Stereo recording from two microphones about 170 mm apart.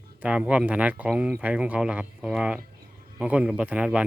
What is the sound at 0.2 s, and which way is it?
Speech, 5° right (ahead or behind).